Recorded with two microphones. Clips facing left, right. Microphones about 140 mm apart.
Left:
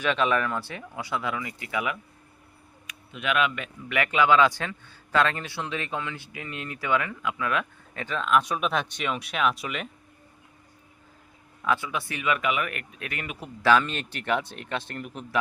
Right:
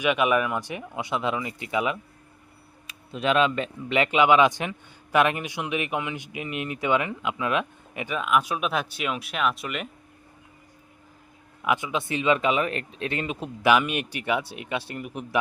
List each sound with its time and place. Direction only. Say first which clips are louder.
0.0 s speech: right 2 dB; 15° right (ahead or behind)
2.8 s speech: right 5 dB; 30° right (ahead or behind); by 9.9 s centre (ahead or behind)
11.6 s speech: right 2 dB; 15° right (ahead or behind)